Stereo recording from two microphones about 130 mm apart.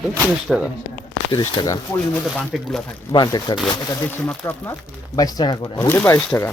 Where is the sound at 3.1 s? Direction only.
35° left (ahead or behind).